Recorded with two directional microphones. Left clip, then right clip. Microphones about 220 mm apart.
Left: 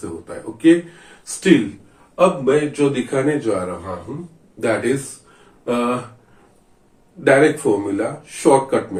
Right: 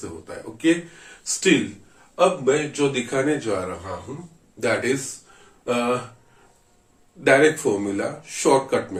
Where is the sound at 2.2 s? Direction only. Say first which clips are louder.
Left 4 dB; 40° right (ahead or behind).